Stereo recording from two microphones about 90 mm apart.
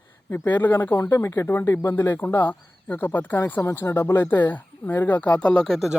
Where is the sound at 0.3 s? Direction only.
25° left (ahead or behind); by 5.9 s 5° left (ahead or behind).